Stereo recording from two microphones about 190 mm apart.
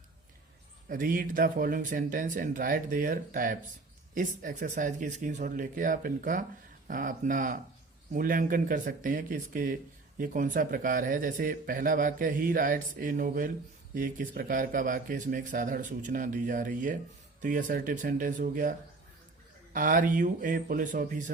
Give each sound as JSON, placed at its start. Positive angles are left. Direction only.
{"t": 0.9, "sound": "speech", "side_deg": -45}
{"t": 19.7, "sound": "speech", "side_deg": -45}